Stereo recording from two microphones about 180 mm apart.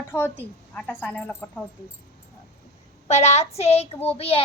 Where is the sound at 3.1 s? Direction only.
40° left (ahead or behind).